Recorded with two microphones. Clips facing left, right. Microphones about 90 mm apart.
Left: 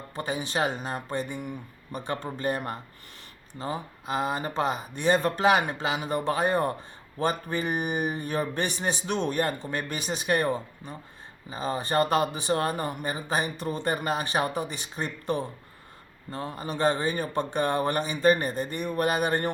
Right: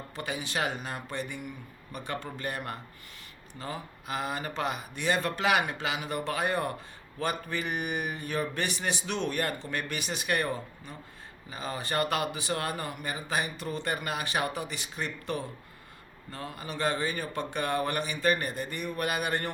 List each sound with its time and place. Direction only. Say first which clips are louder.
0.2 s a man's voice: left 4 dB; 30° left (ahead or behind)